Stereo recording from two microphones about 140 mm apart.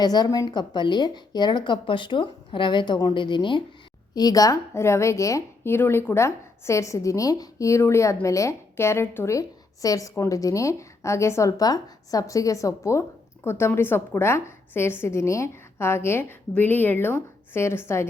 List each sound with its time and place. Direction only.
0.0 s a woman's voice: 30° left (ahead or behind)